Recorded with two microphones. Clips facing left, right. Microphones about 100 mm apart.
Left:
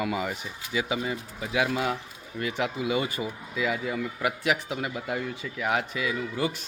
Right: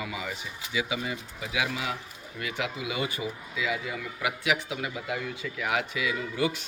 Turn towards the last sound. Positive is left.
turn(degrees=35)  # may be behind; listen again after turning